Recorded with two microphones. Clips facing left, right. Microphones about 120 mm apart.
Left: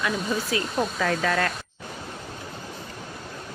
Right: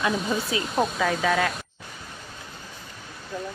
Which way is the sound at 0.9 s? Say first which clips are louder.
Right 1 dB; 5° right (ahead or behind).